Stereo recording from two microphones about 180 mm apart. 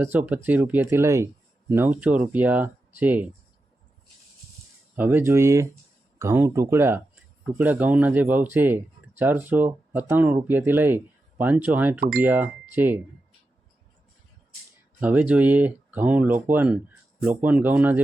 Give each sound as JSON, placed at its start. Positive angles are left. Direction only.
{"t": 0.0, "sound": "speech", "side_deg": -10}
{"t": 4.9, "sound": "speech", "side_deg": -10}
{"t": 11.9, "sound": "speech", "side_deg": -50}
{"t": 12.2, "sound": "speech", "side_deg": -10}
{"t": 15.0, "sound": "speech", "side_deg": -10}